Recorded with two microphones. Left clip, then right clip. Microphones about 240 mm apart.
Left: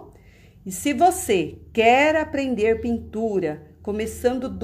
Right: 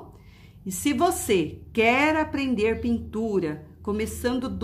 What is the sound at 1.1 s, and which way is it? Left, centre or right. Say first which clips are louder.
Speech: left 2 dB; right.